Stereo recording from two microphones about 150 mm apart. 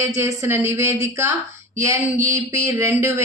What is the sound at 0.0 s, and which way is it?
A woman's voice, 20° right (ahead or behind).